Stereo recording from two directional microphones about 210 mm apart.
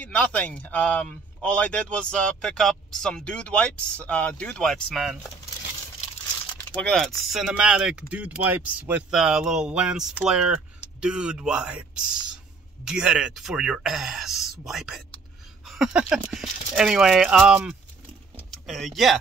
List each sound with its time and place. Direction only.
0.0 s a man's voice: 5° left (ahead or behind)
6.5 s a man's voice: 5° left (ahead or behind)
12.8 s a man's voice: 5° right (ahead or behind)
18.3 s a sound: centre (ahead or behind)